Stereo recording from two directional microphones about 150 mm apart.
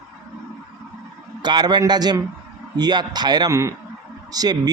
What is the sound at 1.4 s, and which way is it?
Speech, 30° right (ahead or behind).